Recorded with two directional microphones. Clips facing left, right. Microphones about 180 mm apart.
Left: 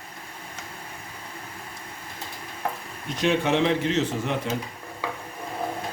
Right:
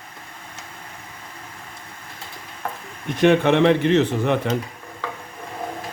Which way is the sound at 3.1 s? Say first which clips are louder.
Right 7 dB; 60° right (ahead or behind).